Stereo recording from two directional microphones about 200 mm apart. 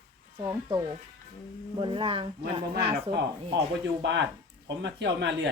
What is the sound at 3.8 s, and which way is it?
Speech, 60° right (ahead or behind).